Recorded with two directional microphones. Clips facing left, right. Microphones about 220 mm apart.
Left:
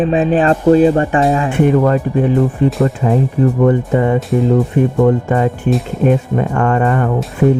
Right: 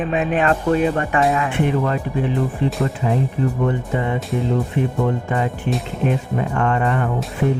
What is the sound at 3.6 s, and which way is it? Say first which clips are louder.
Speech: left 8 dB; 50° left (ahead or behind).